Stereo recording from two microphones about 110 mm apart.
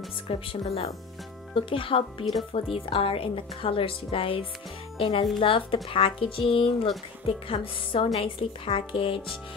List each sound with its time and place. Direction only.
0.3 s speech: 60° left (ahead or behind)